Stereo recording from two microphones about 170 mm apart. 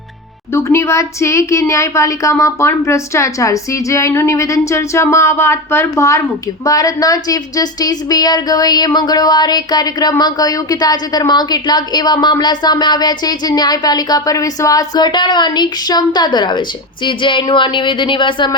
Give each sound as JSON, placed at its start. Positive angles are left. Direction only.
{"t": 0.5, "sound": "a woman's voice", "side_deg": 15}